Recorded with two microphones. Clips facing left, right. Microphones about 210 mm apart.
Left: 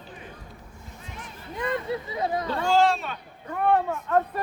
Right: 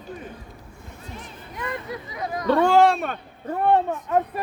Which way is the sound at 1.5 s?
25° left (ahead or behind).